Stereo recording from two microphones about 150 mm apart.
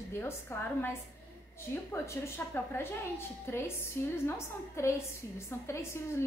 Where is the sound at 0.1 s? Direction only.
15° left (ahead or behind).